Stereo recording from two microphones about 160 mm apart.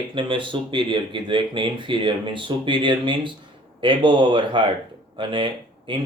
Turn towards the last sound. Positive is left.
turn(degrees=-30)  # may be behind; listen again after turning